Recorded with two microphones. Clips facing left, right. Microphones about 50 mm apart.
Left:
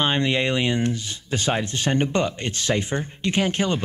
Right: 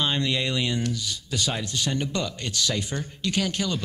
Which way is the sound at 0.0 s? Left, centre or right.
Left.